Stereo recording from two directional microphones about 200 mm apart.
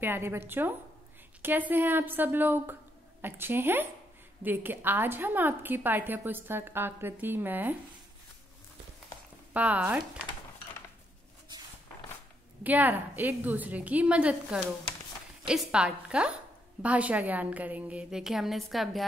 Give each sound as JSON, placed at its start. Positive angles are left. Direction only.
{"t": 0.0, "sound": "a woman's voice", "side_deg": -10}
{"t": 9.5, "sound": "a woman's voice", "side_deg": -5}
{"t": 11.5, "sound": "a sound", "side_deg": -20}
{"t": 12.6, "sound": "a woman's voice", "side_deg": -10}